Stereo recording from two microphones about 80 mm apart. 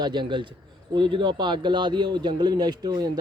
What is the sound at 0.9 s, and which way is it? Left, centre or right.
Speech, right.